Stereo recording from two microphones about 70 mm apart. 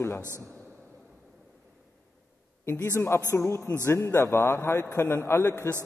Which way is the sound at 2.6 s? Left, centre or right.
Left.